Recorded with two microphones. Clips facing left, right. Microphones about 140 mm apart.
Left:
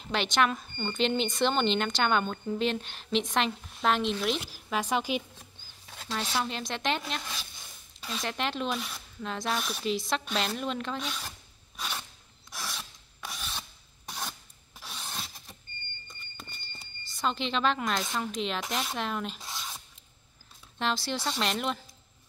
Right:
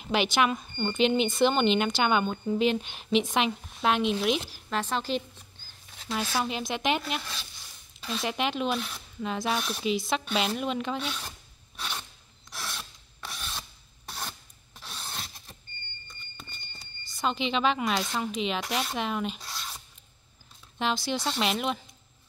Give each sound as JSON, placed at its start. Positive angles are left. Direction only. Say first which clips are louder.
{"t": 0.0, "sound": "speech", "louder": "right 2 dB", "side_deg": -5}
{"t": 6.3, "sound": "speech", "louder": "right 2 dB", "side_deg": -10}
{"t": 8.2, "sound": "speech", "louder": "right 3 dB", "side_deg": -5}
{"t": 11.8, "sound": "filing", "louder": "even", "side_deg": 5}
{"t": 12.7, "sound": "rub", "louder": "right 1 dB", "side_deg": 10}
{"t": 14.8, "sound": "rub", "louder": "even", "side_deg": 10}
{"t": 15.1, "sound": "vehicle", "louder": "even", "side_deg": 0}
{"t": 17.1, "sound": "speech", "louder": "right 2 dB", "side_deg": 0}
{"t": 19.4, "sound": "a sound", "louder": "even", "side_deg": 20}
{"t": 20.8, "sound": "speech", "louder": "right 2 dB", "side_deg": 0}